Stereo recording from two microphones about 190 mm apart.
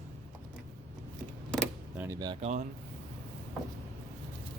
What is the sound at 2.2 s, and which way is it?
Speech, 25° right (ahead or behind).